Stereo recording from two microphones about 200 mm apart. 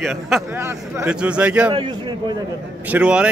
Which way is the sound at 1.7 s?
25° right (ahead or behind).